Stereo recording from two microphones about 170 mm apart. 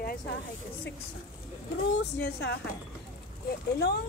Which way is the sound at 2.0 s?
80° left.